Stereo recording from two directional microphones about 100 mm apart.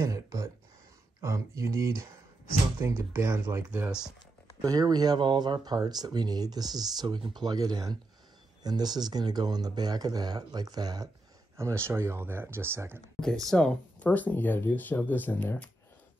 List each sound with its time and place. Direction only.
0.0 s a sound: 35° right (ahead or behind)
1.2 s speech: 30° right (ahead or behind)
4.6 s speech: 40° right (ahead or behind)
11.5 s speech: 25° right (ahead or behind)
13.5 s speech: 10° left (ahead or behind)